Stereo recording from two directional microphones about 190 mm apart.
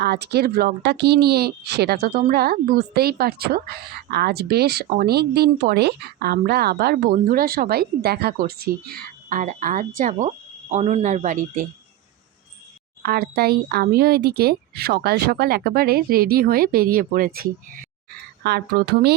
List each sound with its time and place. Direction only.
0.0 s speech: 60° right (ahead or behind); by 11.6 s 40° right (ahead or behind)
13.0 s speech: 55° right (ahead or behind)